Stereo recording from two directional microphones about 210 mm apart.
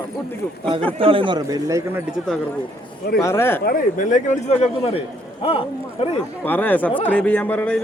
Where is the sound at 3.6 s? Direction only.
40° left (ahead or behind).